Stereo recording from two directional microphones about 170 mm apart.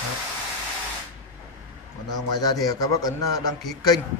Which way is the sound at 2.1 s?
20° left (ahead or behind).